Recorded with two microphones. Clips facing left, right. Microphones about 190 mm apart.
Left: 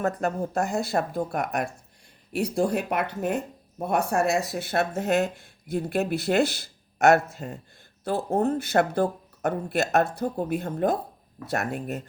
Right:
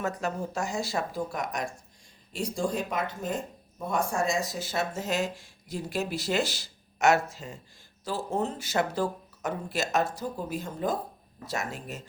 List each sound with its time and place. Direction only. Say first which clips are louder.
0.0 s speech: left 5 dB; 55° left (ahead or behind)